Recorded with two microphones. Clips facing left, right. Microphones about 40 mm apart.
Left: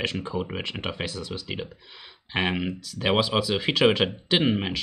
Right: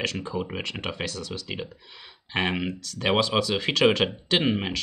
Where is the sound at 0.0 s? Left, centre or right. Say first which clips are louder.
Even; centre.